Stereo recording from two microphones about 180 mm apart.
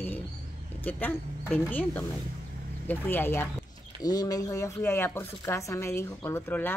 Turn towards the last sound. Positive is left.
turn(degrees=15)  # may be behind; listen again after turning